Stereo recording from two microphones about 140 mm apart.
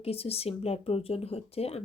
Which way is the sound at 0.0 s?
45° left (ahead or behind).